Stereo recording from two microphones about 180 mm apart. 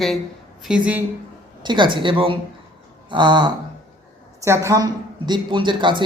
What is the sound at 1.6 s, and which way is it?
A man's voice, 25° right (ahead or behind).